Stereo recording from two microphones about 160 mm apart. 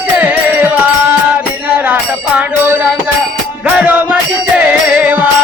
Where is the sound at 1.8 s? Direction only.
10° right (ahead or behind).